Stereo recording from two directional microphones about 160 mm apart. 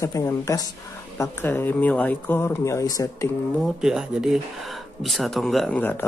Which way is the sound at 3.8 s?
5° right (ahead or behind).